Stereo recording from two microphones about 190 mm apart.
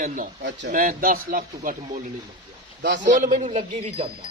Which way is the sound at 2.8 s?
70° right (ahead or behind).